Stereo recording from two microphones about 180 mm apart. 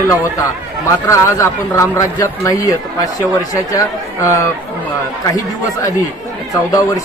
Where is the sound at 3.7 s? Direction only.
15° left (ahead or behind).